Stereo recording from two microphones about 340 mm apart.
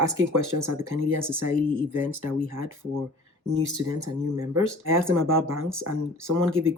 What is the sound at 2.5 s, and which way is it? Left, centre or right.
Speech, right.